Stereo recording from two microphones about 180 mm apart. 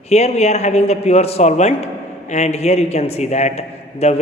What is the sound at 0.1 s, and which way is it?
A man's voice, 35° left (ahead or behind).